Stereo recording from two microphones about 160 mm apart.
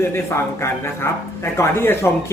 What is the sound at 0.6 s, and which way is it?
Speech, 15° left (ahead or behind).